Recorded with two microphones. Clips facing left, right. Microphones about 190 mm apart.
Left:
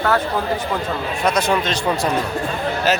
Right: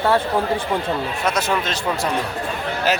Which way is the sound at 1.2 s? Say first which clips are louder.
Left 4 dB; 5° right (ahead or behind).